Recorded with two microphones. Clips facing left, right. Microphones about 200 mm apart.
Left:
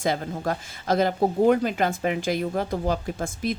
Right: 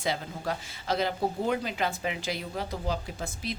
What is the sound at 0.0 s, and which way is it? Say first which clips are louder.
Speech: left 6 dB; 50° left (ahead or behind).